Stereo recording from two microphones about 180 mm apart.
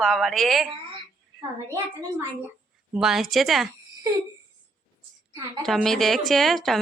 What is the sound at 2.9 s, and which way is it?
Speech, centre (ahead or behind).